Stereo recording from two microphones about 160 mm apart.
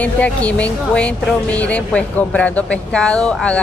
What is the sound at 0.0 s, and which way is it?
Speech, 10° left (ahead or behind).